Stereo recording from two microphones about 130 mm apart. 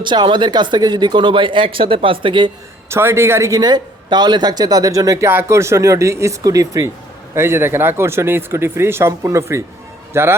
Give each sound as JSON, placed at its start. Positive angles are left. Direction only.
{"t": 0.0, "sound": "speech", "side_deg": -35}
{"t": 2.9, "sound": "a man's voice", "side_deg": -20}